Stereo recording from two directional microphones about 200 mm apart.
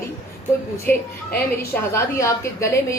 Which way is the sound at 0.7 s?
10° left (ahead or behind).